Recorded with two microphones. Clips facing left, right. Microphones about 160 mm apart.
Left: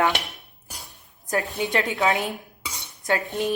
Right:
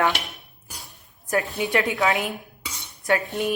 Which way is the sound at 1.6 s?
20° left (ahead or behind).